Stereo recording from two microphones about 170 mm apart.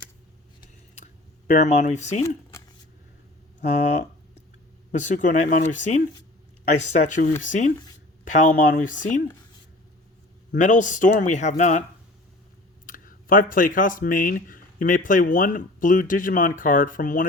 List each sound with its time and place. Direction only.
1.5 s speech: 45° left (ahead or behind)
2.2 s a sound: 20° left (ahead or behind)
4.9 s speech: 45° left (ahead or behind)
10.6 s speech: 50° left (ahead or behind)
12.8 s speech: 55° left (ahead or behind)